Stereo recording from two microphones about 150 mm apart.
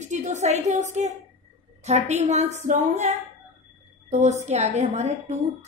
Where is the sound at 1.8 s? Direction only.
50° right (ahead or behind).